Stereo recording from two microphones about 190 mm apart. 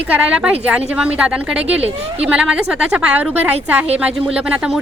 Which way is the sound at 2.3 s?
5° right (ahead or behind).